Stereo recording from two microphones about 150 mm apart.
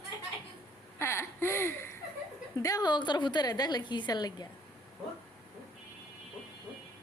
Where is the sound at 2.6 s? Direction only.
25° left (ahead or behind).